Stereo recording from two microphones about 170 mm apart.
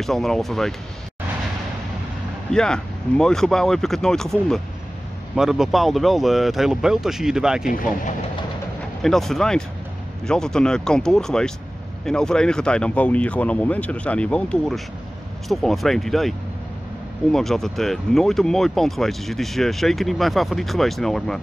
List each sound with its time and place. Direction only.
0.0 s speech: centre (ahead or behind)
2.5 s speech: 5° left (ahead or behind)
7.6 s speech: 55° left (ahead or behind)
9.0 s speech: centre (ahead or behind)